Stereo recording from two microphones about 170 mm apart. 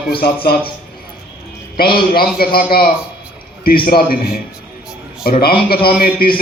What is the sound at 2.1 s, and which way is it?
A man's voice, 60° left (ahead or behind).